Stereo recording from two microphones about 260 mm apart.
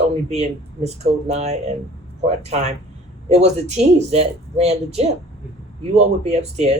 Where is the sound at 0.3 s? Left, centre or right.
Right.